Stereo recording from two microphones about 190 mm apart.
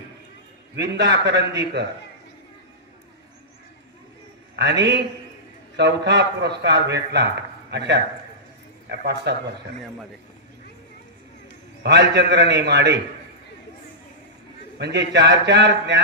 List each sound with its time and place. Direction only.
0.8 s a man's voice: 65° right (ahead or behind)
4.5 s a man's voice: 65° right (ahead or behind)
11.8 s a man's voice: 65° right (ahead or behind)
14.8 s a man's voice: 60° right (ahead or behind)